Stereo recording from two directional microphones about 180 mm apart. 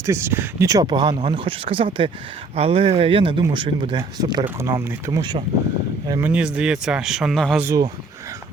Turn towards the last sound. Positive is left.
turn(degrees=-20)  # may be behind; listen again after turning